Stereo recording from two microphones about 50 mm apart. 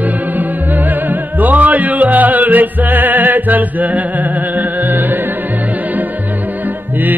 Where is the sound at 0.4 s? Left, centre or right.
Right.